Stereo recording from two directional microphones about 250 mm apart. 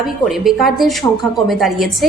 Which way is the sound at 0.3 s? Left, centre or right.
Centre.